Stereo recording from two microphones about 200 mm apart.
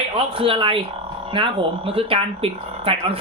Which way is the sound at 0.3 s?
25° right (ahead or behind).